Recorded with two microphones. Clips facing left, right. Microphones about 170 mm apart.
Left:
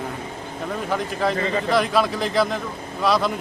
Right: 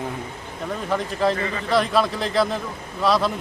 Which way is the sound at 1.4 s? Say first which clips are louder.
Left 4 dB; 35° left (ahead or behind).